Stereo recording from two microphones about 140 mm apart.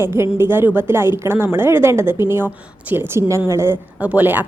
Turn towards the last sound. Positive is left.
turn(degrees=-10)  # may be behind; listen again after turning